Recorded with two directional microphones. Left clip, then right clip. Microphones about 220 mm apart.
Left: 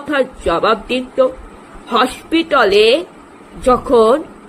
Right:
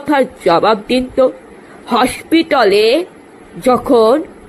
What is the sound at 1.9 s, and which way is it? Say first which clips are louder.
A woman's voice: right 2 dB; 20° right (ahead or behind).